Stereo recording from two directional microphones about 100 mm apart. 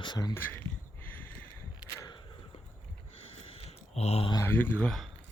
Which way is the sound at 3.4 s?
75° left (ahead or behind).